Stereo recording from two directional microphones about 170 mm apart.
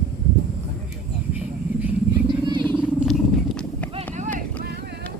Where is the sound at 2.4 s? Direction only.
30° right (ahead or behind).